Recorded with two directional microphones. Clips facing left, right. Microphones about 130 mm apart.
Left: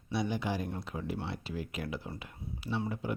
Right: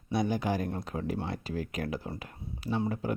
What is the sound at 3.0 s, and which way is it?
Speech, 40° right (ahead or behind).